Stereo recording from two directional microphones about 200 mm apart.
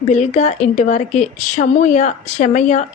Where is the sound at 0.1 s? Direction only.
35° left (ahead or behind).